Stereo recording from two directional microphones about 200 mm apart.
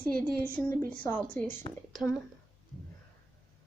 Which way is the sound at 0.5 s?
10° left (ahead or behind).